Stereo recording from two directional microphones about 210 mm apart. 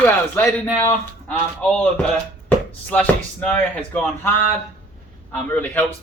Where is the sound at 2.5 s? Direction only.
5° left (ahead or behind).